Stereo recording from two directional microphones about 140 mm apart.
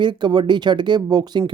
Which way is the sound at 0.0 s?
35° right (ahead or behind).